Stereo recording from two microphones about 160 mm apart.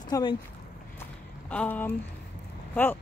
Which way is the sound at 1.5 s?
10° left (ahead or behind).